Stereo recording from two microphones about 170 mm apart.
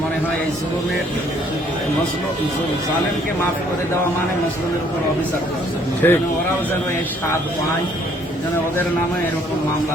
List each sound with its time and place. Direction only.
6.0 s speech: 10° left (ahead or behind)